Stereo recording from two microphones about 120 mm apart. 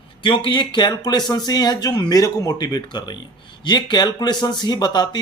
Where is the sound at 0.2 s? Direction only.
45° left (ahead or behind).